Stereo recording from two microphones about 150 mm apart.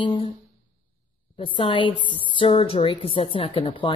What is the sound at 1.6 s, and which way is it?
Speech, 35° left (ahead or behind).